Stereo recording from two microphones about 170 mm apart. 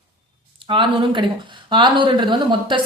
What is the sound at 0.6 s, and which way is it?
A woman's voice, 30° right (ahead or behind).